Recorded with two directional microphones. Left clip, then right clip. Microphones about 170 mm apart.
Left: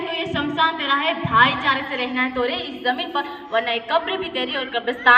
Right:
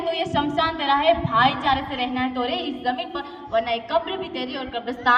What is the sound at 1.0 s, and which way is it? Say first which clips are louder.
A woman's voice: left 2 dB; 60° right (ahead or behind).